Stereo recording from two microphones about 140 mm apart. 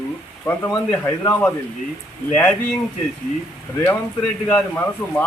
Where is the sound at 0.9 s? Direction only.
15° left (ahead or behind).